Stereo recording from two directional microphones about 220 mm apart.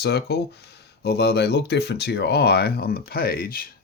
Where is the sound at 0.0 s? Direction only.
50° left (ahead or behind).